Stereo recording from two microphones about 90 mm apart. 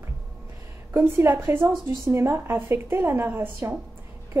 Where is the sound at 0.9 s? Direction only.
30° right (ahead or behind).